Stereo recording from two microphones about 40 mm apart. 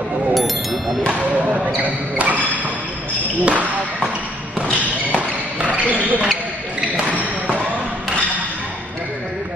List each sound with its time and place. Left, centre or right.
0.3 s a sound: centre
1.7 s speech: right
5.8 s basketball bounce: right